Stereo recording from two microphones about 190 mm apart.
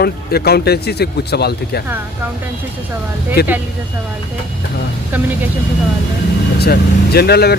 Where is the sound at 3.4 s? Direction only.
60° left (ahead or behind).